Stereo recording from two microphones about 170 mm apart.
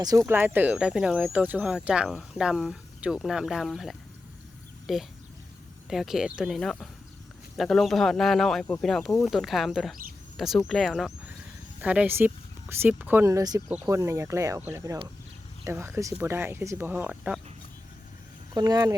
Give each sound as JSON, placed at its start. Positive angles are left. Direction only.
{"t": 0.3, "sound": "speech", "side_deg": -10}
{"t": 11.8, "sound": "speech", "side_deg": -10}
{"t": 18.5, "sound": "speech", "side_deg": -20}